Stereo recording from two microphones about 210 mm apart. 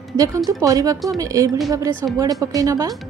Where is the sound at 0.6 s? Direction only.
15° right (ahead or behind).